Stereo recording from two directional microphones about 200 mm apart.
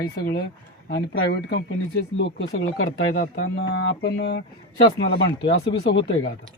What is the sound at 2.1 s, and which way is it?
Speech, 70° left (ahead or behind).